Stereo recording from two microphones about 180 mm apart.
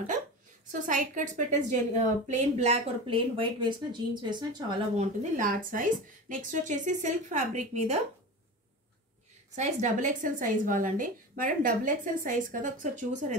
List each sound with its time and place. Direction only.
0.7 s a woman's voice: 45° right (ahead or behind); by 4.7 s 25° right (ahead or behind)
4.9 s a woman's voice: 50° right (ahead or behind)
9.6 s a woman's voice: 40° right (ahead or behind)